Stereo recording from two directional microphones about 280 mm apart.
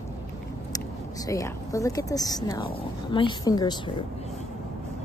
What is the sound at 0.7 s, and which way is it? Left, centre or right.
A woman's voice, centre.